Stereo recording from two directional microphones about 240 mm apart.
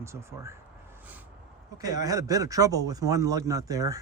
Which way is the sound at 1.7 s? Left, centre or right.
Centre.